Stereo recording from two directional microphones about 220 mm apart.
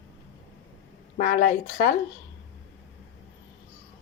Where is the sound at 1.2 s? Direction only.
40° left (ahead or behind).